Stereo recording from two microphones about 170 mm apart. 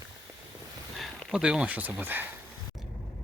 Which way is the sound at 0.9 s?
Centre (ahead or behind).